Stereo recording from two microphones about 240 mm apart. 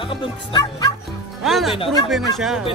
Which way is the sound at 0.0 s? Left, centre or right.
Centre.